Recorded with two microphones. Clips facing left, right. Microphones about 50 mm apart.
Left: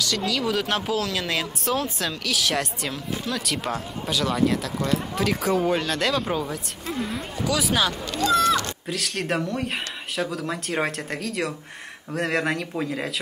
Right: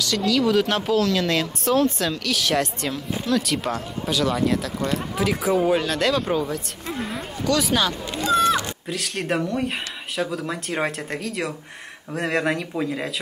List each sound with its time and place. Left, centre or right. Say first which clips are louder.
0.0 s speech: right 4 dB; centre
8.1 s a sound: right 1 dB; right
8.8 s speech: right 1 dB; centre